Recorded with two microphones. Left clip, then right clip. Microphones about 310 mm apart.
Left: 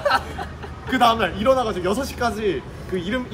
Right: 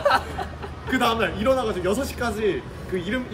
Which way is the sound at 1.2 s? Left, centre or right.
Centre.